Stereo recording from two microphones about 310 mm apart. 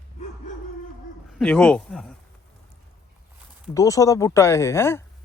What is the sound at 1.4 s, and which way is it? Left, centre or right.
Speech, centre.